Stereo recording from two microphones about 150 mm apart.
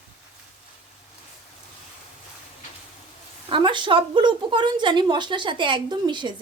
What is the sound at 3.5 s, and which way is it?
A woman's voice, 30° right (ahead or behind).